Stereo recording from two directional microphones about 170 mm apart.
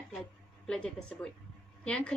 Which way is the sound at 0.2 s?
5° left (ahead or behind).